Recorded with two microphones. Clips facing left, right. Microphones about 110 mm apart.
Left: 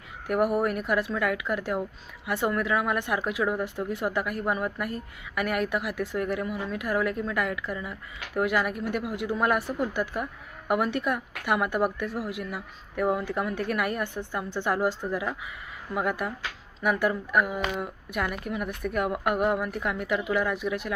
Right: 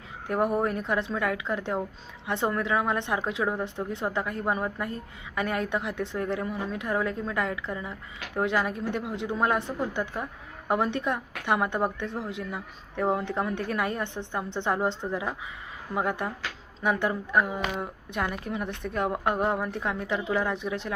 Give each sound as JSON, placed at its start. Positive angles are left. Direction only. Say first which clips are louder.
{"t": 0.3, "sound": "speech", "louder": "left 1 dB", "side_deg": -25}